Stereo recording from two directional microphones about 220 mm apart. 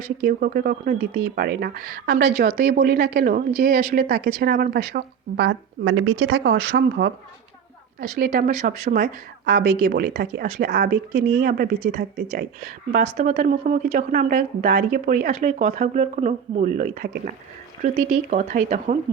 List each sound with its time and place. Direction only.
0.3 s speech: 40° right (ahead or behind)
5.8 s a woman's voice: 75° right (ahead or behind)
6.3 s speech: 50° right (ahead or behind)
13.1 s speech: 35° right (ahead or behind)